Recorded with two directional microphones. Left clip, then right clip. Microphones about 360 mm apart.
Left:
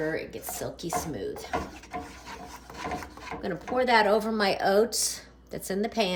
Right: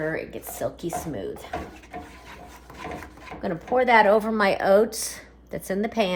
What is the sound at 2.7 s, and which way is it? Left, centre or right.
Filing, centre.